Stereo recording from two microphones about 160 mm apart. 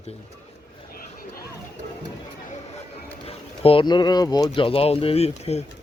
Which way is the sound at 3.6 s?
30° left (ahead or behind).